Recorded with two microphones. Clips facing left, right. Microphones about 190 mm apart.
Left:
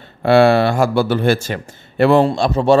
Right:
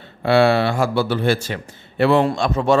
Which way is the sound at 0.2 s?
45° left (ahead or behind).